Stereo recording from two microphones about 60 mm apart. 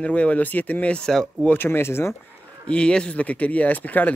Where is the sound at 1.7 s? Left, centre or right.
Left.